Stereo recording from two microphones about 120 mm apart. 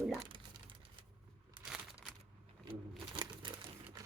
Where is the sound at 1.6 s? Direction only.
5° right (ahead or behind).